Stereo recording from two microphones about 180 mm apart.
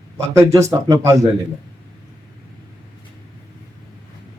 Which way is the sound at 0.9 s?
15° right (ahead or behind).